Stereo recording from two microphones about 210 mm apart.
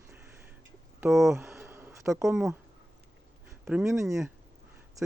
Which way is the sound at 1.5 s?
5° right (ahead or behind).